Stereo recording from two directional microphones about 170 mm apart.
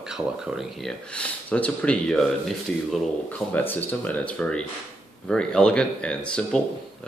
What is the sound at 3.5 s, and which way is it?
Speech, 10° left (ahead or behind).